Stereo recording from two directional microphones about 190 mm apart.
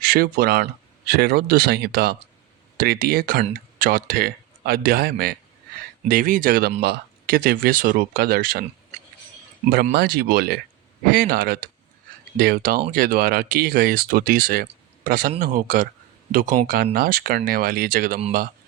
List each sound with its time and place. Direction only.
0.0 s speech: 50° right (ahead or behind)